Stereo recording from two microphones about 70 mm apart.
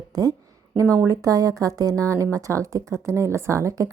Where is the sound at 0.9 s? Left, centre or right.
Right.